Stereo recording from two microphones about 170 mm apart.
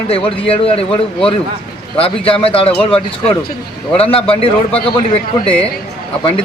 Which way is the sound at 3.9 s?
35° left (ahead or behind).